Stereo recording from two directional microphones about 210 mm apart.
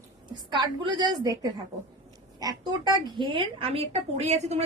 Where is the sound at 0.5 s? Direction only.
20° right (ahead or behind).